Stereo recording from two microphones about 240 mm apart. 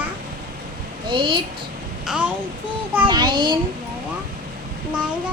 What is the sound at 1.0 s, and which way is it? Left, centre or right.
Speech, centre.